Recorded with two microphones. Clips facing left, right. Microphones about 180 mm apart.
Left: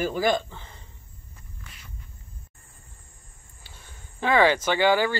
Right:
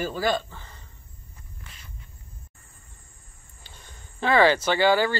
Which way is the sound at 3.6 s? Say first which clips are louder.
Right 1 dB; 10° left (ahead or behind).